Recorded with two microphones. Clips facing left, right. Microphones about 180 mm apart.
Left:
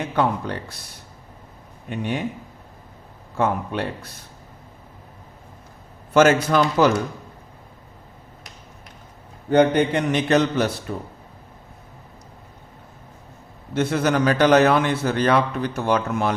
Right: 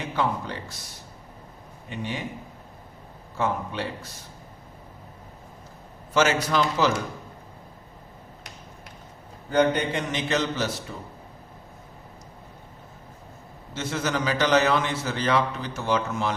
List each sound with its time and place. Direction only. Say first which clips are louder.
0.2 s a man's voice: left 5 dB; 60° left (ahead or behind)
1.9 s a man's voice: left 6 dB; 55° left (ahead or behind)
3.3 s a man's voice: left 5 dB; 55° left (ahead or behind)
6.1 s speech: left 6 dB; 50° left (ahead or behind)
9.5 s a man's voice: left 5 dB; 60° left (ahead or behind)
13.7 s a man's voice: left 8 dB; 60° left (ahead or behind)